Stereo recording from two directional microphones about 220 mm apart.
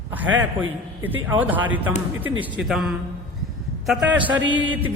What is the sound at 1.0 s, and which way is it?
A man's voice, 10° right (ahead or behind).